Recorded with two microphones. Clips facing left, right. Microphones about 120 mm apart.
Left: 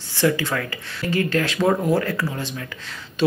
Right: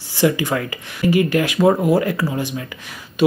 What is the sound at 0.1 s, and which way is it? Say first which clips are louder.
Speech: right 3 dB; 15° right (ahead or behind).